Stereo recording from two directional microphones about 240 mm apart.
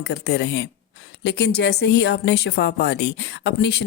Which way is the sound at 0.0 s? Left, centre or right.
Left.